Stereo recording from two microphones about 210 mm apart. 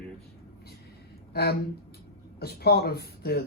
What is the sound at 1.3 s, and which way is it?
Speech, 50° left (ahead or behind).